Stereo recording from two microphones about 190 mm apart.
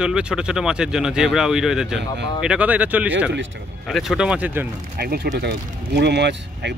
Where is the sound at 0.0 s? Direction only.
5° right (ahead or behind).